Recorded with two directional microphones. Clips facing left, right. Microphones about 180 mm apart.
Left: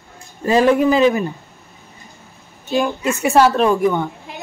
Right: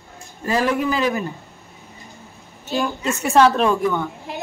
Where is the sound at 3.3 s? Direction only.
Centre (ahead or behind).